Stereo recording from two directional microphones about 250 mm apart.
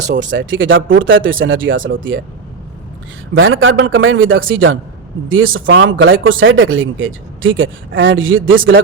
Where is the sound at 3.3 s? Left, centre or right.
Right.